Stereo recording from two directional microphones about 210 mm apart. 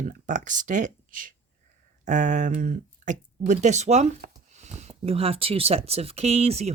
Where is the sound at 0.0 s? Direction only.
35° right (ahead or behind).